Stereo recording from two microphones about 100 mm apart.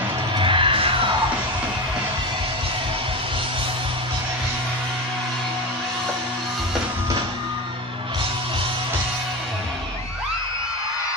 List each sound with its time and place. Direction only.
0.4 s music: 60° right (ahead or behind)